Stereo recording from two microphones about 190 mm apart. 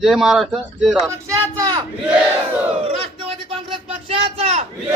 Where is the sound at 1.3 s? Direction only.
25° right (ahead or behind).